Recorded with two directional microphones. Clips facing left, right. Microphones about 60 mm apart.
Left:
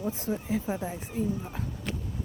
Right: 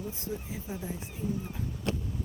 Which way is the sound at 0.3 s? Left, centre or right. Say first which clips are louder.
Left 8 dB; left.